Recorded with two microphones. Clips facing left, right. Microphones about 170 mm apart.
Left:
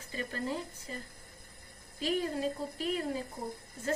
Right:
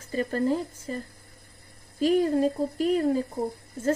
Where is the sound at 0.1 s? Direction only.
45° right (ahead or behind).